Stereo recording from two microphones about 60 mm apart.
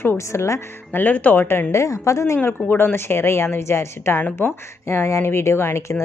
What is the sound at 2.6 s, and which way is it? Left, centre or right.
A woman's voice, left.